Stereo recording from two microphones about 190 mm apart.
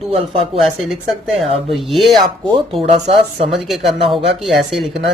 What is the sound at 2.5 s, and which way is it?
Speech, 30° right (ahead or behind).